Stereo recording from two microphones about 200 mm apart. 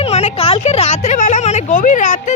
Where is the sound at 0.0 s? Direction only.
30° left (ahead or behind).